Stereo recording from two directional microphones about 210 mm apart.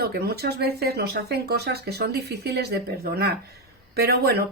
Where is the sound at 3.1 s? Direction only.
50° right (ahead or behind).